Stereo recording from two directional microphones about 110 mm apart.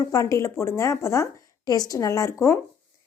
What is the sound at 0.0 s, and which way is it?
A woman's voice, 30° left (ahead or behind).